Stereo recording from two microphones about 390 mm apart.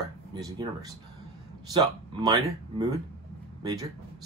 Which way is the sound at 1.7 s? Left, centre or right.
Centre.